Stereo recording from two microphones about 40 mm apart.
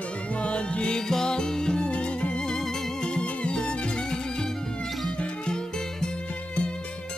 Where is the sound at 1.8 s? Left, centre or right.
Left.